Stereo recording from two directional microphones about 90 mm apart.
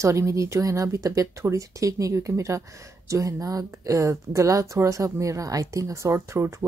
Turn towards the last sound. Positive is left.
turn(degrees=-35)  # may be behind; listen again after turning